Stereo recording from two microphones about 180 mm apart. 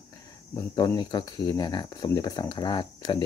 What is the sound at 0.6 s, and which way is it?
Speech, 20° left (ahead or behind).